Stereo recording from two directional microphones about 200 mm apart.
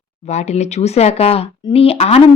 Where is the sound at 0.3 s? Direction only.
35° left (ahead or behind).